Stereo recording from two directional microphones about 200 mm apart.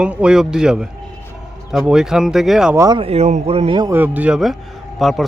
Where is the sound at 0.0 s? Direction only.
5° right (ahead or behind).